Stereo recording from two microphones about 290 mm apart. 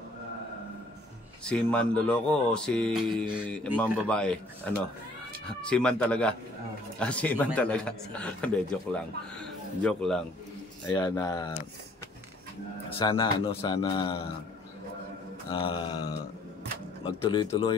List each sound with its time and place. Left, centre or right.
1.4 s speech: centre
10.9 s speech: centre
13.0 s speech: centre
15.5 s speech: centre